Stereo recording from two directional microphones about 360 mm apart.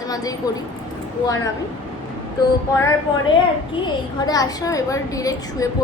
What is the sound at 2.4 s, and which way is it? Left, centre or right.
Speech, centre.